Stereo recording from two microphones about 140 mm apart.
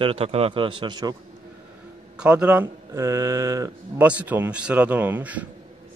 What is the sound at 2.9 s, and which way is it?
Mantra, 20° right (ahead or behind).